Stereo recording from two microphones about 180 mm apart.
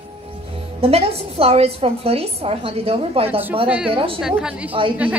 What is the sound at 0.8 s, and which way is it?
A woman's voice, 35° right (ahead or behind).